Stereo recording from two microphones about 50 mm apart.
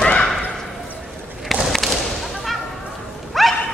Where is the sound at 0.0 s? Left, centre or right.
Centre.